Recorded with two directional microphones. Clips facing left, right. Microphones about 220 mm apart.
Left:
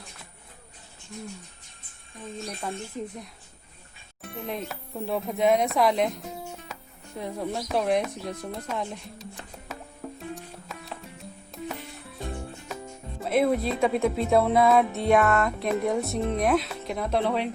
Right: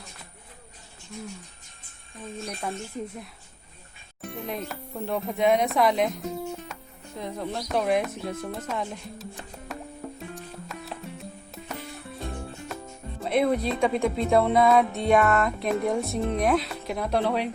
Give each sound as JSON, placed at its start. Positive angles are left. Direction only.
{"t": 2.6, "sound": "speech", "side_deg": -5}
{"t": 4.2, "sound": "speech", "side_deg": 0}
{"t": 6.7, "sound": "music", "side_deg": 0}
{"t": 7.2, "sound": "speech", "side_deg": 10}
{"t": 9.6, "sound": "music", "side_deg": 0}
{"t": 13.2, "sound": "speech", "side_deg": 0}